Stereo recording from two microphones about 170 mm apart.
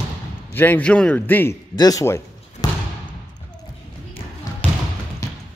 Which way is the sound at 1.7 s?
20° left (ahead or behind).